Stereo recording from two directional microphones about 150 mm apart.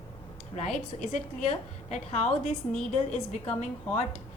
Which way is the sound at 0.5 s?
50° left (ahead or behind).